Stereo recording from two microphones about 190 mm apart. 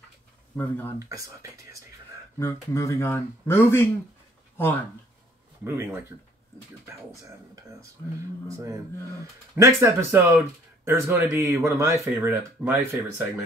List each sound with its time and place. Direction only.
0.6 s speech: 10° left (ahead or behind)
0.9 s speech: 15° right (ahead or behind)
2.3 s speech: 15° left (ahead or behind)
5.6 s speech: 15° right (ahead or behind)